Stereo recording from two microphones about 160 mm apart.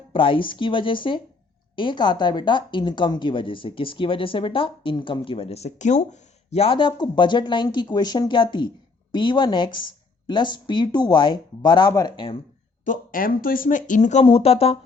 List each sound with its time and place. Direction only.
0.1 s a woman's voice: 30° left (ahead or behind)
12.8 s speech: 55° left (ahead or behind)
14.3 s a woman's voice: 35° left (ahead or behind)